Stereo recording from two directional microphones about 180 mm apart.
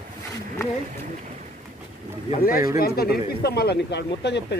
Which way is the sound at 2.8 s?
60° left (ahead or behind).